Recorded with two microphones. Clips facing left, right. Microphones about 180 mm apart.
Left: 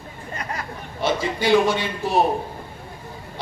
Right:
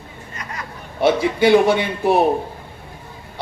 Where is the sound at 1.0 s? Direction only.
60° right (ahead or behind).